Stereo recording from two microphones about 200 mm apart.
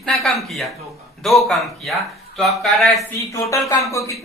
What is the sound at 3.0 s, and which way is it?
Speech, 15° left (ahead or behind).